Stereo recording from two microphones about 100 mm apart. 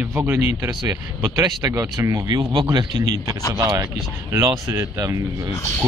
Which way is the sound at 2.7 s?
45° right (ahead or behind).